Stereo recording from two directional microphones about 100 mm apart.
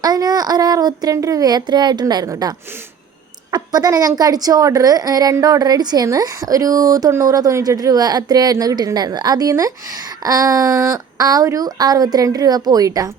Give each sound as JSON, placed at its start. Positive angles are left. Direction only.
{"t": 0.0, "sound": "speech", "side_deg": -40}
{"t": 3.5, "sound": "a woman's voice", "side_deg": -40}